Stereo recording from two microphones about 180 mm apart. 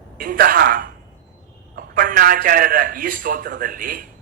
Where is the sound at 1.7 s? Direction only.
50° right (ahead or behind).